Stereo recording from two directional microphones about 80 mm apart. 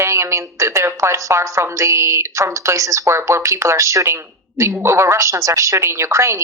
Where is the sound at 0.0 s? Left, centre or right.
Right.